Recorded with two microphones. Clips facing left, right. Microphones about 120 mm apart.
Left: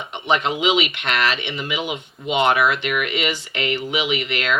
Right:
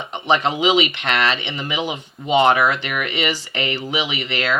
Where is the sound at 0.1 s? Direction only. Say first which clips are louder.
Right 2 dB; 35° right (ahead or behind).